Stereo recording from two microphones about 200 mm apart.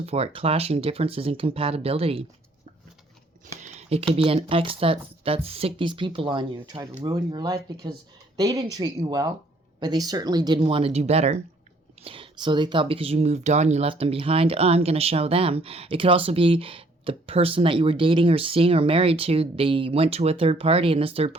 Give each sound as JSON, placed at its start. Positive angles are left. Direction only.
{"t": 0.0, "sound": "speech", "side_deg": -30}
{"t": 3.6, "sound": "typing", "side_deg": -35}
{"t": 4.1, "sound": "speech", "side_deg": -30}